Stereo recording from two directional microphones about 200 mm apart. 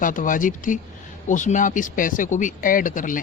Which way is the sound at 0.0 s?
40° left (ahead or behind).